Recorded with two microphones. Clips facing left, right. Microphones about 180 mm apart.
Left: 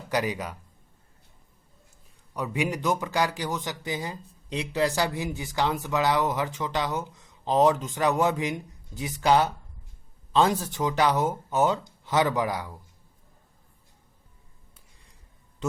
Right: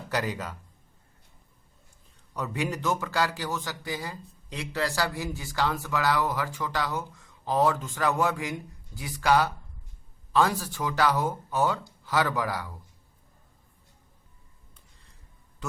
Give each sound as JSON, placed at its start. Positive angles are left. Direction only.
{"t": 0.1, "sound": "speech", "side_deg": 15}
{"t": 2.3, "sound": "a man's voice", "side_deg": 15}